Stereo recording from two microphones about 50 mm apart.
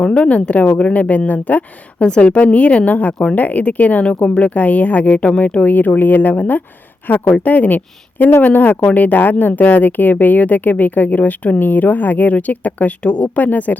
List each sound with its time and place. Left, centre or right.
0.0 s a woman's voice: left
2.0 s a woman's voice: left